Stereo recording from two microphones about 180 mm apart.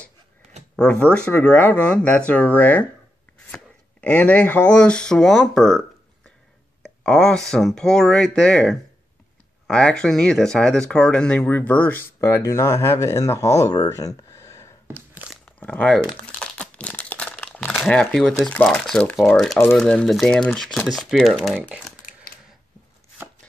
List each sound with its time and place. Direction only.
0.7 s speech: 5° left (ahead or behind)
16.3 s crumpling: 5° left (ahead or behind)
19.7 s speech: 5° left (ahead or behind)